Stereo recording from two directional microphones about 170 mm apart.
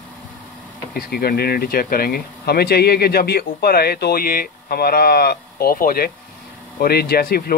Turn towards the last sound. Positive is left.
turn(degrees=65)  # may be behind; listen again after turning